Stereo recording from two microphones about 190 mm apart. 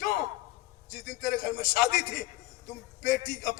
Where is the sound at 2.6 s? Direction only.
45° left (ahead or behind).